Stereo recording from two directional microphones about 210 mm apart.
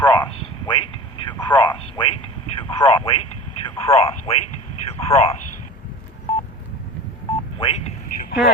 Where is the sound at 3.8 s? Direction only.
30° left (ahead or behind).